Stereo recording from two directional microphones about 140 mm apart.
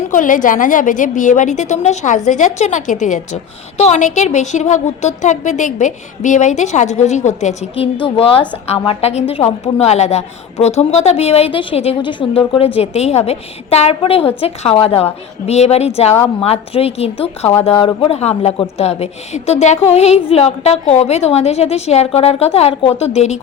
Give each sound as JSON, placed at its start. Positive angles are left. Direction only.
{"t": 0.1, "sound": "a woman's voice", "side_deg": 70}
{"t": 8.0, "sound": "a woman's voice", "side_deg": 45}